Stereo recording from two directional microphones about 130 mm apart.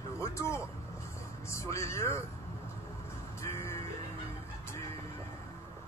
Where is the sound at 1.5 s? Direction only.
20° left (ahead or behind).